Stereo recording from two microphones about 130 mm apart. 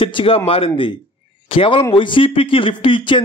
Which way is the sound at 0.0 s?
40° left (ahead or behind).